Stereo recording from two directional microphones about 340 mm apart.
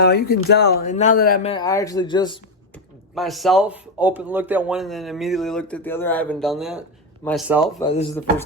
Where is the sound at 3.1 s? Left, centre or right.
Centre.